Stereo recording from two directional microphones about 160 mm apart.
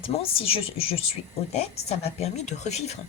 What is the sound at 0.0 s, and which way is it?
Speech, 35° left (ahead or behind).